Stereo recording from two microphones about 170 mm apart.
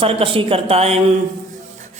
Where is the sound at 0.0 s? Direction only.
30° right (ahead or behind).